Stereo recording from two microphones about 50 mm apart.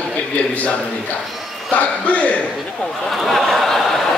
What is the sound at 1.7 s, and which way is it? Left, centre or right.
Speech, left.